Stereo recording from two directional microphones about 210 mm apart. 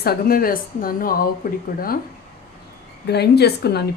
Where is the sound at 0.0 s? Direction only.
45° left (ahead or behind).